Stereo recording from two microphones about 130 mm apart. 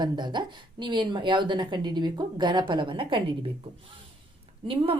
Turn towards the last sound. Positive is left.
turn(degrees=-45)  # may be behind; listen again after turning